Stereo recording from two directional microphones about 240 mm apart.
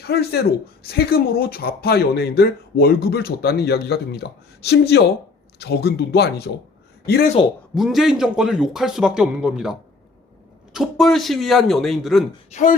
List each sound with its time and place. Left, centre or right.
0.0 s speech: left
7.8 s a man's voice: centre
10.8 s a man's voice: centre
12.5 s speech: left